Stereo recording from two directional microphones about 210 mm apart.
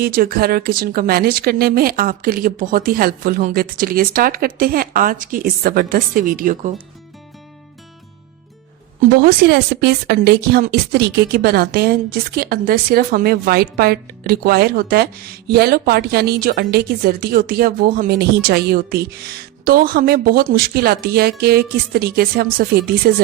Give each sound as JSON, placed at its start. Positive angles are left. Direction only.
{"t": 0.0, "sound": "speech", "side_deg": -45}
{"t": 9.2, "sound": "speech", "side_deg": -50}